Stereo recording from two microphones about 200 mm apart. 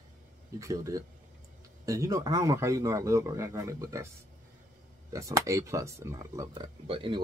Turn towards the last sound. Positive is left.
turn(degrees=-25)  # may be behind; listen again after turning